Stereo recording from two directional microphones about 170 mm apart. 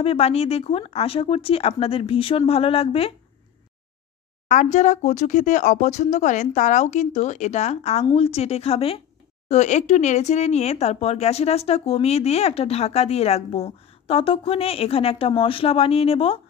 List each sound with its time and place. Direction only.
0.0 s speech: 35° left (ahead or behind)
4.5 s speech: 45° left (ahead or behind)